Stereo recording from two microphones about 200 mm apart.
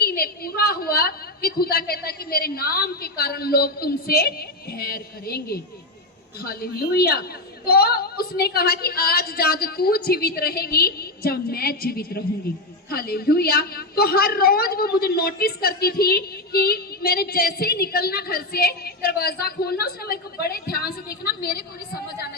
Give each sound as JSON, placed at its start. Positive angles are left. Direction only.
{"t": 0.0, "sound": "a woman's voice", "side_deg": 50}